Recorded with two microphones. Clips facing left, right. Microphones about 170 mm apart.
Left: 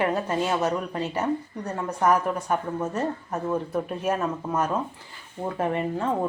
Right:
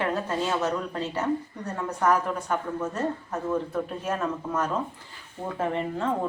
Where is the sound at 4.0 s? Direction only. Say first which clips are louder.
Left 3 dB; 10° left (ahead or behind).